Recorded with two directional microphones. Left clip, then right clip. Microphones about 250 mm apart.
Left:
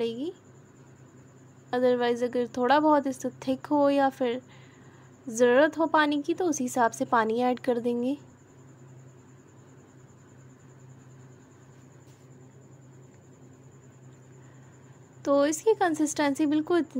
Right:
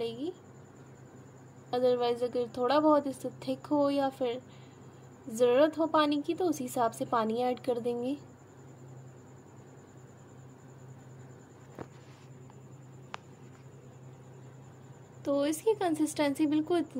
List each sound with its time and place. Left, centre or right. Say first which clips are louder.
0.0 s a sound: left 5 dB; left
1.7 s a woman's voice: left 3 dB; left
15.2 s a woman's voice: left 6 dB; left